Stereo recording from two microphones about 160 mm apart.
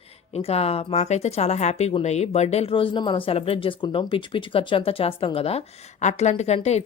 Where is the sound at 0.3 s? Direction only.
40° left (ahead or behind).